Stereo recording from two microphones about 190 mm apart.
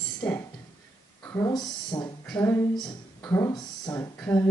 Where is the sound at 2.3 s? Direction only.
10° left (ahead or behind).